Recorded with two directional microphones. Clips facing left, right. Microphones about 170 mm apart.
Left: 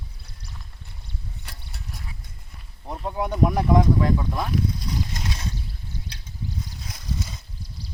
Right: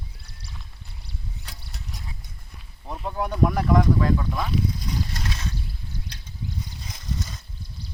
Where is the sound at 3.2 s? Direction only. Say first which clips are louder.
Left 1 dB; 20° left (ahead or behind).